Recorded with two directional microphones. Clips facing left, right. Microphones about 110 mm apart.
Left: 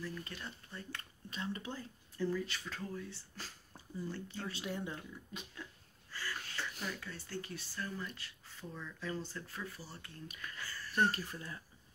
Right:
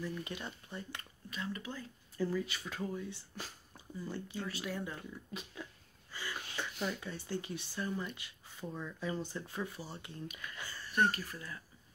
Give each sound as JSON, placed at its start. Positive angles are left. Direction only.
{"t": 0.0, "sound": "speech", "side_deg": -15}
{"t": 1.3, "sound": "speech", "side_deg": 30}
{"t": 2.1, "sound": "speech", "side_deg": -10}
{"t": 4.5, "sound": "speech", "side_deg": 25}
{"t": 5.3, "sound": "speech", "side_deg": -5}
{"t": 6.1, "sound": "sneeze", "side_deg": -15}
{"t": 6.8, "sound": "speech", "side_deg": -20}
{"t": 11.0, "sound": "speech", "side_deg": 30}